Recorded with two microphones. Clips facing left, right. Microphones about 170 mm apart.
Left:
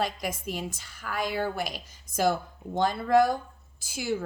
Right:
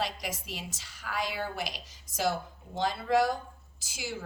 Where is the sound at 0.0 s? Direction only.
50° left (ahead or behind).